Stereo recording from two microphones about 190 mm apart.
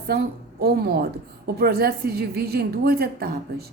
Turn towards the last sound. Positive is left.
turn(degrees=-55)  # may be behind; listen again after turning